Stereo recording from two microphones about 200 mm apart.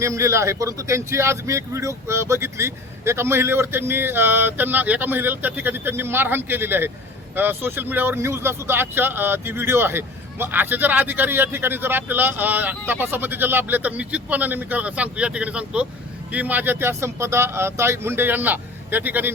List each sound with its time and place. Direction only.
0.0 s speech: 15° right (ahead or behind)